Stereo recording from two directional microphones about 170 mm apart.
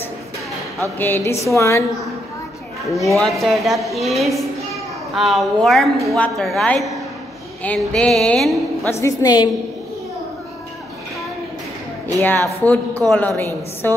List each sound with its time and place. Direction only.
0.9 s a woman's voice: 10° left (ahead or behind)
3.2 s speech: centre (ahead or behind)
9.0 s a woman's voice: 25° left (ahead or behind)
12.2 s a woman's voice: 10° left (ahead or behind)